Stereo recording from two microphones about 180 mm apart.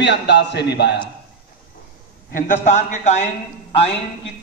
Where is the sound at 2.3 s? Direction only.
50° left (ahead or behind).